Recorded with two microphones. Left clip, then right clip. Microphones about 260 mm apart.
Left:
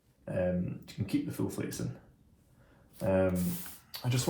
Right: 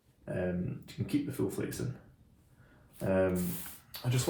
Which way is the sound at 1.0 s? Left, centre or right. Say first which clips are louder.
Right 1 dB; left.